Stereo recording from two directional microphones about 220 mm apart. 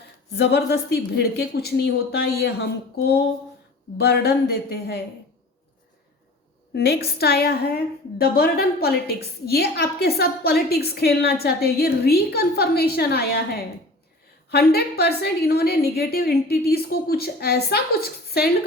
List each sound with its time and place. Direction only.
0.3 s a woman's voice: 50° left (ahead or behind)
6.7 s a woman's voice: 45° left (ahead or behind)